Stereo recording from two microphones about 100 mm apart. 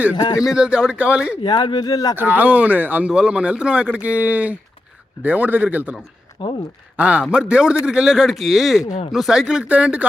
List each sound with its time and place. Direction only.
0.5 s speech: 10° right (ahead or behind)
1.4 s speech: 50° left (ahead or behind)
2.1 s speech: 20° right (ahead or behind)
6.4 s speech: 55° left (ahead or behind)
6.9 s speech: 15° right (ahead or behind)